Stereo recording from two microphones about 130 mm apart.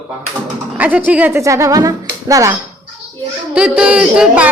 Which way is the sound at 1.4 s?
25° right (ahead or behind).